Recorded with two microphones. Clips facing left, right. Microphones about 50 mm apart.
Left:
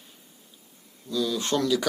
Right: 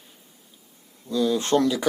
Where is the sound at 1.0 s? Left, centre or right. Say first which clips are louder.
Right 4 dB; right.